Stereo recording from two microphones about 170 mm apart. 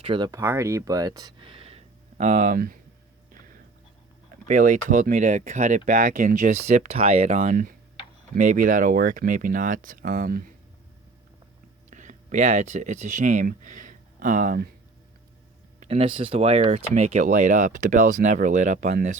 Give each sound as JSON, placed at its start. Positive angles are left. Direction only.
{"t": 0.0, "sound": "speech", "side_deg": -30}
{"t": 0.3, "sound": "speech", "side_deg": -15}
{"t": 4.4, "sound": "speech", "side_deg": -50}
{"t": 11.9, "sound": "speech", "side_deg": -45}
{"t": 15.8, "sound": "speech", "side_deg": -35}